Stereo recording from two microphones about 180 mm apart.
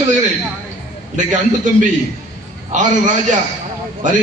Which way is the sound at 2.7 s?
45° right (ahead or behind).